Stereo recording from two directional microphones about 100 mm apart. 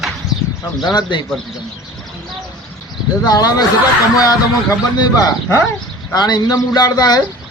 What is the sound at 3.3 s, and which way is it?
Speech, 40° left (ahead or behind).